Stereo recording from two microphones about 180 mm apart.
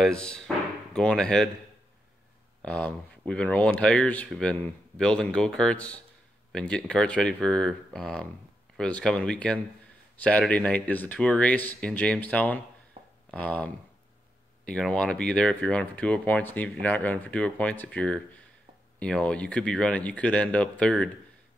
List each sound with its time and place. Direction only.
0.0 s speech: 5° left (ahead or behind)
2.6 s speech: 5° left (ahead or behind)
13.0 s a sound: 30° right (ahead or behind)
13.3 s speech: 10° left (ahead or behind)